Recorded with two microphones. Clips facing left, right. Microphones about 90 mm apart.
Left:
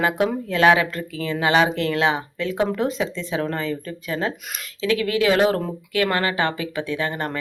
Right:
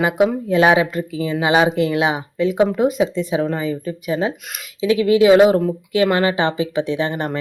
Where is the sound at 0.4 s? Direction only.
15° right (ahead or behind).